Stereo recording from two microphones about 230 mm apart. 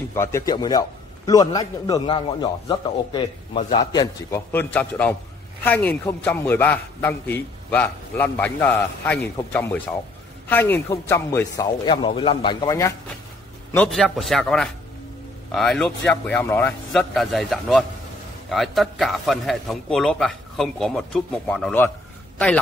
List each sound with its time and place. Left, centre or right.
0.1 s a man's voice: centre
13.7 s a man's voice: centre